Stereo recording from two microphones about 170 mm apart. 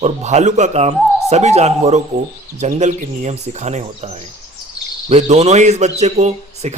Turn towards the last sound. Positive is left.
turn(degrees=-40)  # may be behind; listen again after turning